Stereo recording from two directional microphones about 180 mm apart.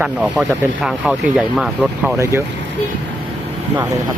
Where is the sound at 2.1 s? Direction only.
15° right (ahead or behind).